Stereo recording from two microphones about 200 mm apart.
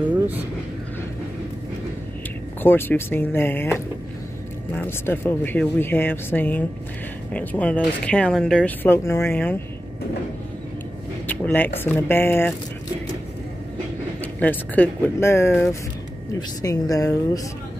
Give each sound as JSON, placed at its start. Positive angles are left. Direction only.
{"t": 2.6, "sound": "speech", "side_deg": 10}
{"t": 4.8, "sound": "speech", "side_deg": 10}
{"t": 11.2, "sound": "speech", "side_deg": 10}
{"t": 14.2, "sound": "speech", "side_deg": 10}